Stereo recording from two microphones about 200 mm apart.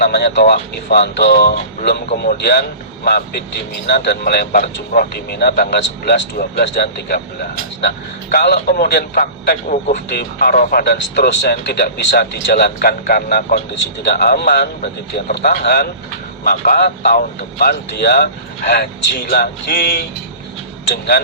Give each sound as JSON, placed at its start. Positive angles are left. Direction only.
{"t": 0.0, "sound": "speech", "side_deg": 55}
{"t": 9.9, "sound": "speech", "side_deg": 55}